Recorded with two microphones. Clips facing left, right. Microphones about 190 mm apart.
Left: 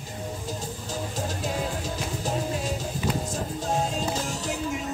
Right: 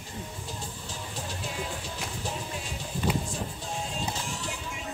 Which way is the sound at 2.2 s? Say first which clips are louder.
Left 10 dB; 40° left (ahead or behind).